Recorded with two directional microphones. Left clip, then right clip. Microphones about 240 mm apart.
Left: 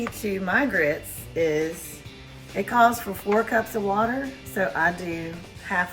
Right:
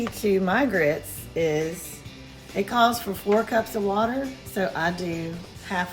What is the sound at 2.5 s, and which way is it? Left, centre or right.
A woman's voice, centre.